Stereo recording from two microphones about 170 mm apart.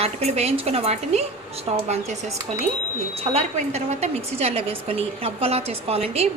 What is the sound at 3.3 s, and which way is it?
A woman's voice, 40° right (ahead or behind).